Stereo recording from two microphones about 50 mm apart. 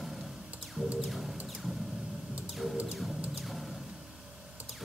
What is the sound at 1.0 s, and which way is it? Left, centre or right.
Speech, centre.